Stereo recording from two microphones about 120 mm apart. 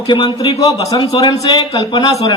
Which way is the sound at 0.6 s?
30° left (ahead or behind).